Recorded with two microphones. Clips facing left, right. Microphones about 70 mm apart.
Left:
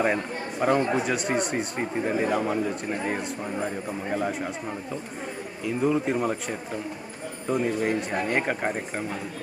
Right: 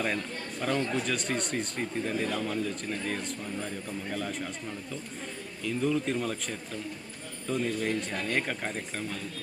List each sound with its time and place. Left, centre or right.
0.6 s speech: left
1.0 s speech: centre
1.8 s speech: left
5.6 s speech: centre